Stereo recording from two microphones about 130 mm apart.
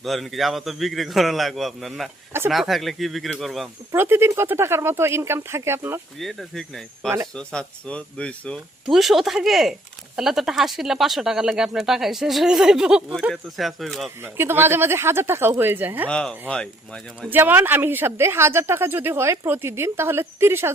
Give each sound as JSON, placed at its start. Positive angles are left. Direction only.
{"t": 0.0, "sound": "speech", "side_deg": 0}
{"t": 3.9, "sound": "speech", "side_deg": -15}
{"t": 6.1, "sound": "speech", "side_deg": 0}
{"t": 14.3, "sound": "speech", "side_deg": -15}
{"t": 16.0, "sound": "speech", "side_deg": 10}
{"t": 17.2, "sound": "speech", "side_deg": -15}